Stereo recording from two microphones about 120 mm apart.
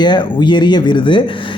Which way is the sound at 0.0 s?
40° left (ahead or behind).